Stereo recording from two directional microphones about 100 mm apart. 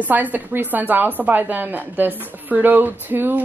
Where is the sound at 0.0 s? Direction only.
15° right (ahead or behind).